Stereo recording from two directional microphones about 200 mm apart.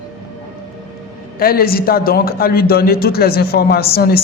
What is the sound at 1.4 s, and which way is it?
A man's voice, 50° left (ahead or behind).